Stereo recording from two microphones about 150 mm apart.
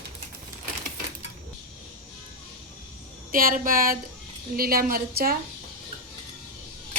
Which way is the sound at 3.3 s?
70° right (ahead or behind).